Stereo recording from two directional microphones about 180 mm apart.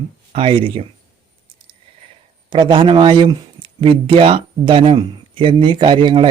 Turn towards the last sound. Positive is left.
turn(degrees=-25)  # may be behind; listen again after turning